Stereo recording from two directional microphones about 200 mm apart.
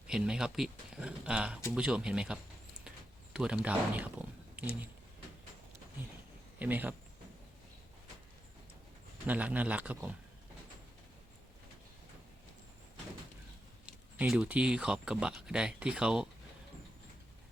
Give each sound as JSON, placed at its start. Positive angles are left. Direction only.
{"t": 0.1, "sound": "speech", "side_deg": -5}
{"t": 6.6, "sound": "speech", "side_deg": -10}
{"t": 9.2, "sound": "speech", "side_deg": -10}
{"t": 13.8, "sound": "speech", "side_deg": -5}